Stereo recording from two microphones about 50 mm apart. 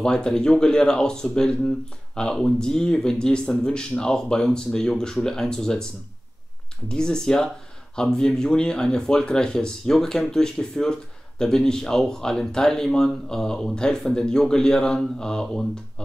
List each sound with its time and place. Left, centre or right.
0.0 s speech: centre
6.9 s speech: centre